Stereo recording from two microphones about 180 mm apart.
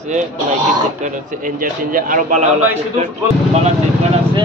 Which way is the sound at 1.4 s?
50° right (ahead or behind).